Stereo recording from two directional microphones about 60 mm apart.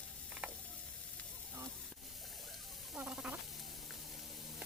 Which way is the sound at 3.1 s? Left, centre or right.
Centre.